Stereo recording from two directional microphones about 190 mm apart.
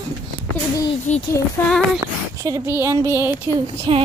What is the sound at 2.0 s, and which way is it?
Speech, 15° right (ahead or behind).